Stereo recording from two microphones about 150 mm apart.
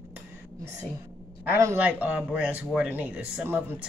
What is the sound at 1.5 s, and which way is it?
Speech, 15° right (ahead or behind).